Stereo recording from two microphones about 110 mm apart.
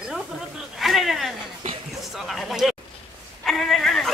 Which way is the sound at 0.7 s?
Centre (ahead or behind).